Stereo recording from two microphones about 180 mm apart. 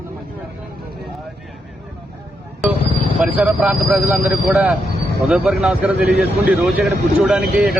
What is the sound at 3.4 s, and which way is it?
Speech, 5° right (ahead or behind).